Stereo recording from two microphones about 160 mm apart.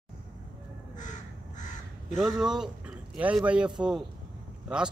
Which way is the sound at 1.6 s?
50° left (ahead or behind).